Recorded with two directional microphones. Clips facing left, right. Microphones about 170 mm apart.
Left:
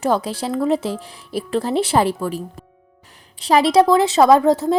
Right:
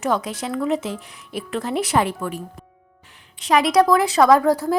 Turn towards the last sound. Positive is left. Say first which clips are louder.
# left 2 dB
turn(degrees=25)  # may be behind; listen again after turning